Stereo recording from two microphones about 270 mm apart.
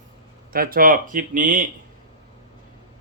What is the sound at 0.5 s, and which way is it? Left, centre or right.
Speech, right.